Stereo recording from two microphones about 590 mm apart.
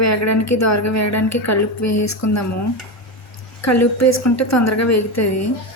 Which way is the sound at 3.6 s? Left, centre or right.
Left.